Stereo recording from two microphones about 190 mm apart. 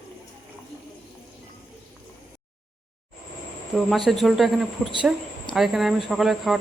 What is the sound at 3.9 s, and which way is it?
A man's voice, centre (ahead or behind).